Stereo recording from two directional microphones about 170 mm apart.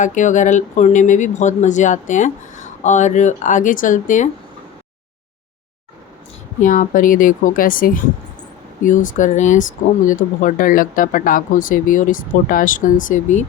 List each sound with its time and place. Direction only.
0.0 s speech: 45° left (ahead or behind)
6.6 s speech: 50° left (ahead or behind)